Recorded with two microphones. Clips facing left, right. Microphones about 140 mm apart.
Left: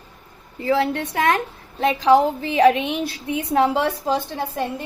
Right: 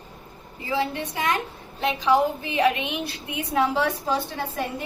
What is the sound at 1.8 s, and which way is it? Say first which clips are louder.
Speech: left 5 dB; 90° left.